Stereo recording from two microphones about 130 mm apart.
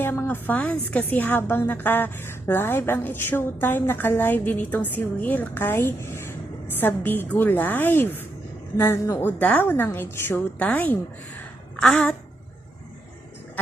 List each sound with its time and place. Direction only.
0.0 s a woman's voice: 15° left (ahead or behind)